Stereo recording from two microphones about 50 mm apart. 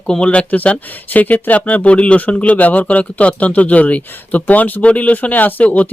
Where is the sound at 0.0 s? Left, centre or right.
Centre.